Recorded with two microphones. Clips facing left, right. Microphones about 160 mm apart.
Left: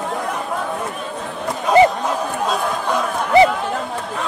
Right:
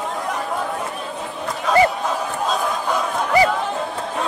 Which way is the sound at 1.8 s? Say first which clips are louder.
Left 4 dB; 20° left (ahead or behind).